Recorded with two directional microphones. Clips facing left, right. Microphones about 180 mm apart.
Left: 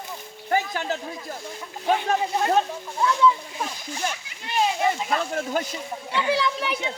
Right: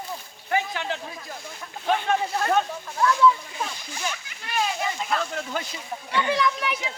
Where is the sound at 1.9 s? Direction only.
20° left (ahead or behind).